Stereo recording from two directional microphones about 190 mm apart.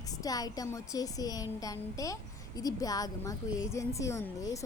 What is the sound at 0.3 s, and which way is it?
A woman's voice, 20° left (ahead or behind).